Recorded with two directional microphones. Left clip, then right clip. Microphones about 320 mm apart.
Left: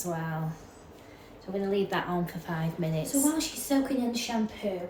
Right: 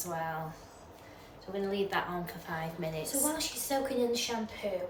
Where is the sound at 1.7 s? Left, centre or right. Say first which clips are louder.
Left 4 dB; centre.